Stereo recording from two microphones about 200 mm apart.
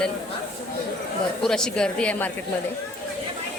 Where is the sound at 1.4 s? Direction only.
5° left (ahead or behind).